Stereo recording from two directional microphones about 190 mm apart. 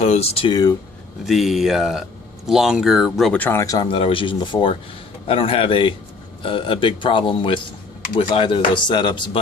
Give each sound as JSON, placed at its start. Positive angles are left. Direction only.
{"t": 0.0, "sound": "speech", "side_deg": 35}
{"t": 1.2, "sound": "speech", "side_deg": 0}